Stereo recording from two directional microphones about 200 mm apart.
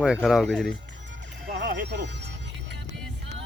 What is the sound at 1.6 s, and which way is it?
Music, 50° right (ahead or behind).